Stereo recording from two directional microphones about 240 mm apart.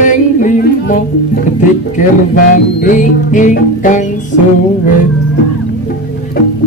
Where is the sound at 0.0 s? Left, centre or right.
Left.